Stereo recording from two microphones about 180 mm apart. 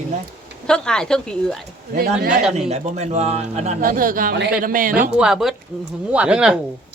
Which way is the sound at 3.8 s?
50° right (ahead or behind).